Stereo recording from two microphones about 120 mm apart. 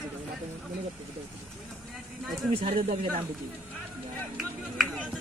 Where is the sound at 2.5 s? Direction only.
55° right (ahead or behind).